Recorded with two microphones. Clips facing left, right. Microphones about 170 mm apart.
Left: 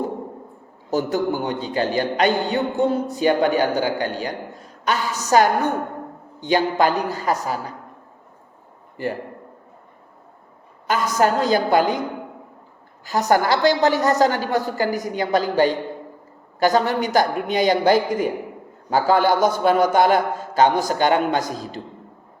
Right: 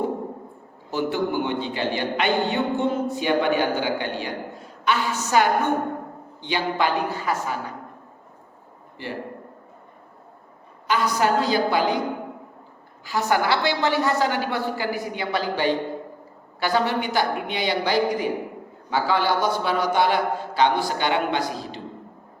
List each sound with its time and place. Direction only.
0.9 s a woman's voice: 40° left (ahead or behind)
9.0 s a man's voice: 45° left (ahead or behind)
10.8 s a man's voice: 45° left (ahead or behind)
13.1 s a man's voice: 40° left (ahead or behind)